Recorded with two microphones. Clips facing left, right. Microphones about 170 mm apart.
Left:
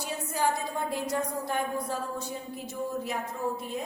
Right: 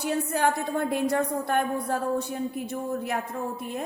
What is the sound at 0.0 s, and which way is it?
A woman's voice, 60° right (ahead or behind).